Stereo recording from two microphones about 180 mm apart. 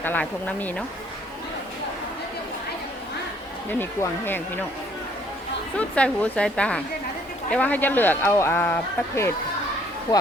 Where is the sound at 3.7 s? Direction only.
10° left (ahead or behind).